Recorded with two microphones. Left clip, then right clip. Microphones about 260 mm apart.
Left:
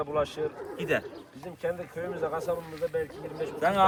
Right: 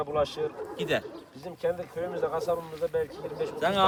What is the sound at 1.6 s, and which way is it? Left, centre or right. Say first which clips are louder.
Speech: right 3 dB; right.